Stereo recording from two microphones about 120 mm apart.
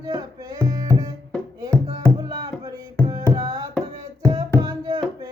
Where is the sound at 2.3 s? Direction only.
35° right (ahead or behind).